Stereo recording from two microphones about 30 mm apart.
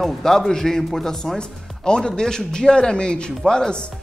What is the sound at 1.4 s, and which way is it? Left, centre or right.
Speech, left.